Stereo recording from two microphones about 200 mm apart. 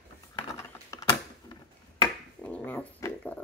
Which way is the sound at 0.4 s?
15° left (ahead or behind).